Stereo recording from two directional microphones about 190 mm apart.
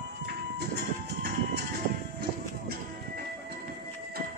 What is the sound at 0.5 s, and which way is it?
Music, 55° right (ahead or behind).